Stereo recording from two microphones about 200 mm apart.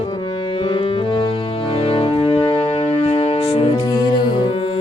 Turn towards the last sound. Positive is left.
turn(degrees=30)  # may be behind; listen again after turning